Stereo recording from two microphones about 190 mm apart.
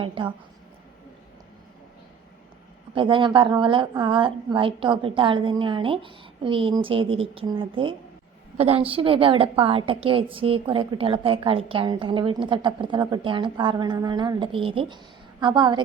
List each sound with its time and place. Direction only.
0.0 s a woman's voice: 25° right (ahead or behind)
2.9 s a woman's voice: 25° right (ahead or behind)